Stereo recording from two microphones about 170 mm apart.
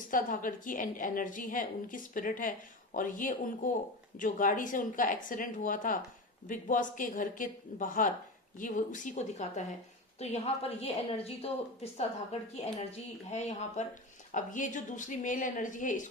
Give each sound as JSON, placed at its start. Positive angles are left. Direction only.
{"t": 0.1, "sound": "a woman's voice", "side_deg": 50}